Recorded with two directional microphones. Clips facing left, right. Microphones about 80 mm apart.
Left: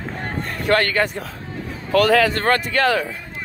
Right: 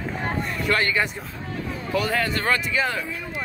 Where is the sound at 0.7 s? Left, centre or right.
Left.